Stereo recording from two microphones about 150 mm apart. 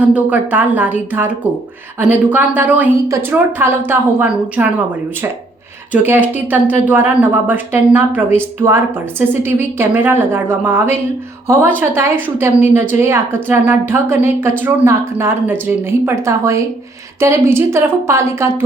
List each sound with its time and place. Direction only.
0.0 s a woman's voice: 10° right (ahead or behind)
5.9 s a woman's voice: 10° right (ahead or behind)